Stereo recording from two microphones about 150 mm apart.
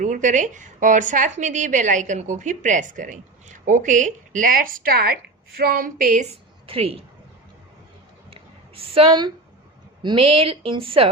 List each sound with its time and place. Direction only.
0.0 s speech: 55° right (ahead or behind)
6.2 s a woman's voice: 40° right (ahead or behind)
8.3 s a sound: 40° right (ahead or behind)
10.0 s a woman's voice: 35° right (ahead or behind)